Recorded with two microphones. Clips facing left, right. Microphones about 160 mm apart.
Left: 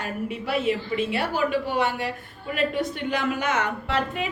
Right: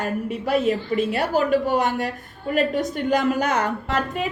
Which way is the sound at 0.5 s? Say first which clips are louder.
Right 4 dB; 40° right (ahead or behind).